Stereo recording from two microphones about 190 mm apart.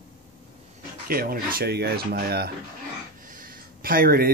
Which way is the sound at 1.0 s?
50° right (ahead or behind).